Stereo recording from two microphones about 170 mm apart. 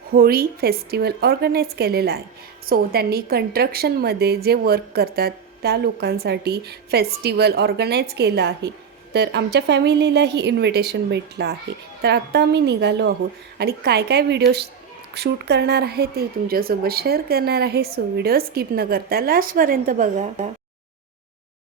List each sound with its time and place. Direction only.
0.1 s a woman's voice: 60° right (ahead or behind)